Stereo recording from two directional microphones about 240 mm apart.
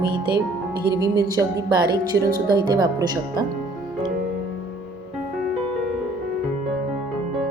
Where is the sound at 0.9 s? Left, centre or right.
Centre.